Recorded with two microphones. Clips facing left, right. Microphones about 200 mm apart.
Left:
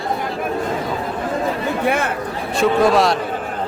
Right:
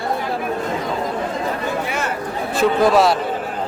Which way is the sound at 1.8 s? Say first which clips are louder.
Left 5 dB; 55° left (ahead or behind).